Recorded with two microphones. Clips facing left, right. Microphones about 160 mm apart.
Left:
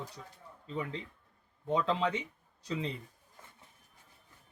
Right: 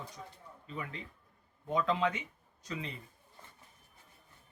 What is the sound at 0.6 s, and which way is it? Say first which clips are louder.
Speech: left 5 dB; 30° left (ahead or behind).